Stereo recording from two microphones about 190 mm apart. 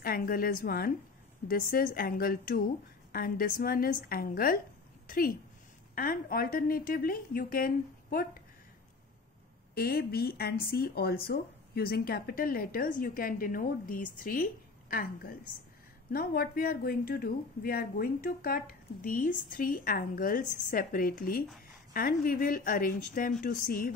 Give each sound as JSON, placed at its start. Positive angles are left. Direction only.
{"t": 0.0, "sound": "speech", "side_deg": 50}
{"t": 9.8, "sound": "a woman's voice", "side_deg": 55}